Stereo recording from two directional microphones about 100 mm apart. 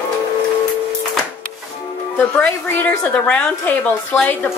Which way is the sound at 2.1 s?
15° left (ahead or behind).